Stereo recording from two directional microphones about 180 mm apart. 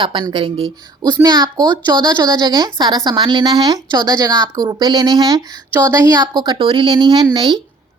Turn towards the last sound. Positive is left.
turn(degrees=-25)  # may be behind; listen again after turning